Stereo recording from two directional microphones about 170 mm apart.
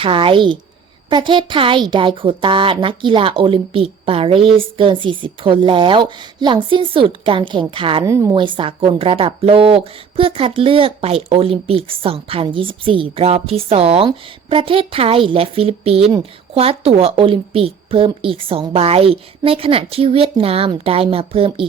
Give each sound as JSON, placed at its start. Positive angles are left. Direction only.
{"t": 0.0, "sound": "a woman's voice", "side_deg": -30}
{"t": 8.0, "sound": "a woman's voice", "side_deg": -20}